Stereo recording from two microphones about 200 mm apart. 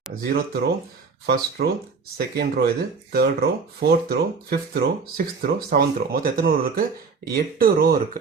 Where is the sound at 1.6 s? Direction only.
50° right (ahead or behind).